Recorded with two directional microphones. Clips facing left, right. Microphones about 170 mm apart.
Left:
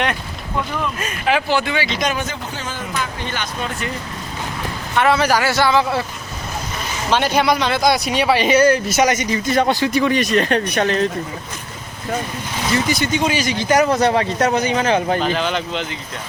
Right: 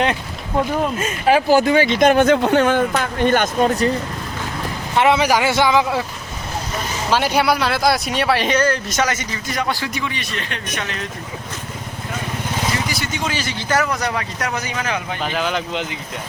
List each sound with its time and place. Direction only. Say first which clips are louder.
1.3 s speech: right 5 dB; 40° right (ahead or behind)
4.9 s a man's voice: right 1 dB; 20° right (ahead or behind)
7.1 s speech: left 1 dB; 5° right (ahead or behind); by 9.6 s 20° left (ahead or behind)
9.6 s speech: left 6 dB; 30° left (ahead or behind)
10.0 s speech: left 11 dB; 45° left (ahead or behind)
12.9 s speech: left 6 dB; 20° left (ahead or behind)
13.8 s speech: left 7 dB; 30° left (ahead or behind)
15.2 s speech: left 2 dB; 5° right (ahead or behind)